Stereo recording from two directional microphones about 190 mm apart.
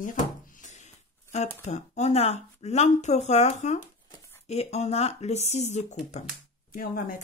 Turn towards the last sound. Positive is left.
turn(degrees=45)  # may be behind; listen again after turning